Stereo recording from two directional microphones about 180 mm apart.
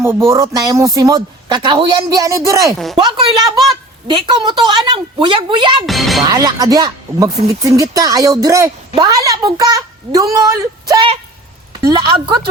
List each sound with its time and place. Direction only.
0.3 s speech: 15° right (ahead or behind)
2.7 s speech: centre (ahead or behind)
3.0 s speech: 25° right (ahead or behind)
5.8 s speech: centre (ahead or behind)
6.2 s speech: 20° right (ahead or behind)